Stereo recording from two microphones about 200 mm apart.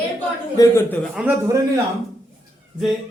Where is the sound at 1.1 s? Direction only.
5° right (ahead or behind).